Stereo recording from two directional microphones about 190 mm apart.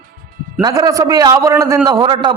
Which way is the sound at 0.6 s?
20° right (ahead or behind).